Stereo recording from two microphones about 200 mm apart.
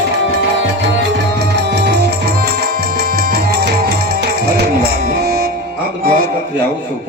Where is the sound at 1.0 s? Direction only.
60° right (ahead or behind).